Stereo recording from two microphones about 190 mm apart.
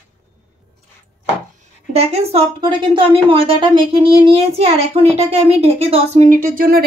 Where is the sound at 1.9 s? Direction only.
35° right (ahead or behind).